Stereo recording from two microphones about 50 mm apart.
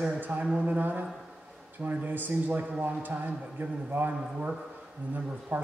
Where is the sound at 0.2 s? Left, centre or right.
Right.